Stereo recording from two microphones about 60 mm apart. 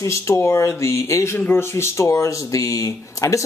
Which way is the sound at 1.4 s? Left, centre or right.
Left.